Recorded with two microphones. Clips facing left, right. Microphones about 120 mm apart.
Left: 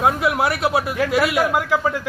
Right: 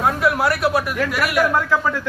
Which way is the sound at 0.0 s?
20° left (ahead or behind).